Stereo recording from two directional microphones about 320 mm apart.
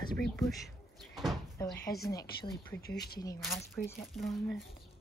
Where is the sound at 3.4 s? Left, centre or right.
Centre.